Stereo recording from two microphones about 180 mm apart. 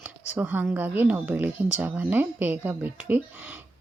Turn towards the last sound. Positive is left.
turn(degrees=-10)  # may be behind; listen again after turning